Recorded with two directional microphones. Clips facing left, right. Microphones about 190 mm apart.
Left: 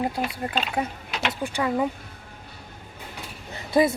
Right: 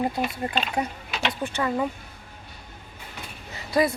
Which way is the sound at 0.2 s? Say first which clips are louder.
Right 1 dB; centre (ahead or behind).